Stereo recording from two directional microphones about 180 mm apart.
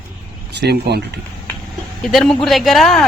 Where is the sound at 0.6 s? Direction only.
65° right (ahead or behind).